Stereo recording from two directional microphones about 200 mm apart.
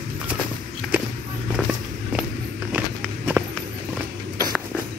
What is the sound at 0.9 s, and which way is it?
Walk, 10° right (ahead or behind).